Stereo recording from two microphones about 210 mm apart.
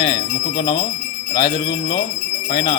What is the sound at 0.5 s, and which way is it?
A man's voice, 20° left (ahead or behind).